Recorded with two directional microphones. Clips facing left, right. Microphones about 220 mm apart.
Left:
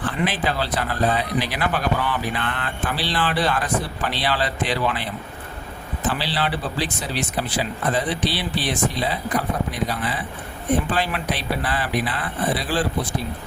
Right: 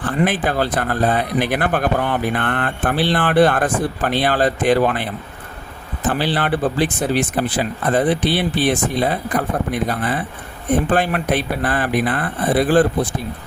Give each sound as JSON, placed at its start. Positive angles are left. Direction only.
{"t": 0.1, "sound": "speech", "side_deg": -50}
{"t": 6.1, "sound": "speech", "side_deg": -50}